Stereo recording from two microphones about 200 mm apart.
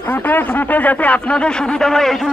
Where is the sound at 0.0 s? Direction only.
10° left (ahead or behind).